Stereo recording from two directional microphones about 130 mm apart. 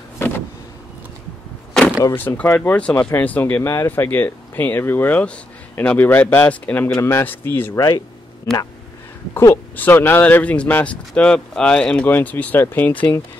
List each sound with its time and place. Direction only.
2.1 s speech: 15° left (ahead or behind)
7.7 s speech: 25° left (ahead or behind)
9.3 s speech: 20° left (ahead or behind)